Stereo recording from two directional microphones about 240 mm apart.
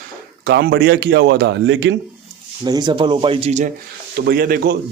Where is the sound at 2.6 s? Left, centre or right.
Centre.